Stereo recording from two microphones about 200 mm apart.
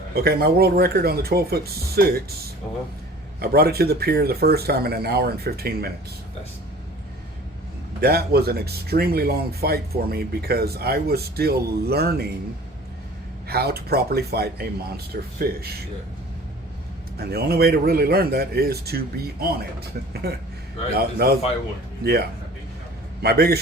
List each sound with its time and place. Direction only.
0.1 s speech: 50° right (ahead or behind)
3.4 s speech: 50° right (ahead or behind)
8.0 s speech: 50° right (ahead or behind)
13.5 s speech: 50° right (ahead or behind)
17.2 s speech: 50° right (ahead or behind)
20.9 s speech: 50° right (ahead or behind)